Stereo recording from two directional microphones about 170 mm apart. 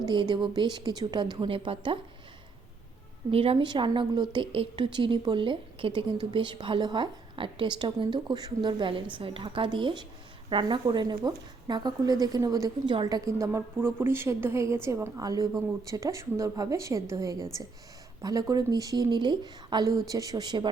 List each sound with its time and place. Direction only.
0.0 s speech: 25° right (ahead or behind)
3.3 s speech: 35° right (ahead or behind)